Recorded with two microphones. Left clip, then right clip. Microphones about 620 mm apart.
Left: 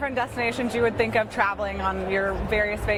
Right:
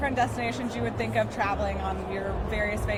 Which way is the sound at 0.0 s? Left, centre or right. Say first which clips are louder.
Left 1 dB; left.